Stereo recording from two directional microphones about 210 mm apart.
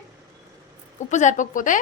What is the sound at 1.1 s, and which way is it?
Speech, 35° left (ahead or behind).